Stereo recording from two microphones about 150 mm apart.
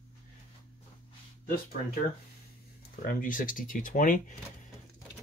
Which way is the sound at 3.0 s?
65° left (ahead or behind).